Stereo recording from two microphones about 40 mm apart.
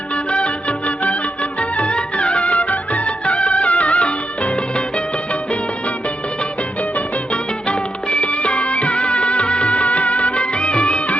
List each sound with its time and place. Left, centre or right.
0.3 s music: left
7.7 s music: left